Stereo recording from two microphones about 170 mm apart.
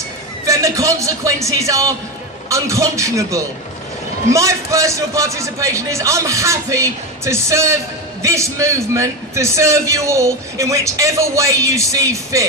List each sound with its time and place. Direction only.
0.4 s a man's voice: 20° right (ahead or behind)